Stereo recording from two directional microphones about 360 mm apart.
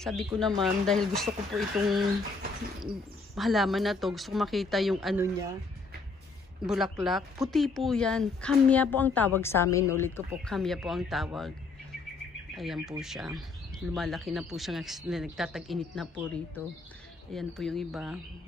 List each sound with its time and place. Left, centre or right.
0.0 s speech: centre
3.3 s speech: centre
6.6 s speech: centre
12.5 s speech: centre
17.3 s speech: centre